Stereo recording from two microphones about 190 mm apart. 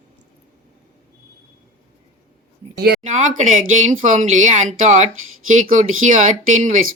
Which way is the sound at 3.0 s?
40° right (ahead or behind).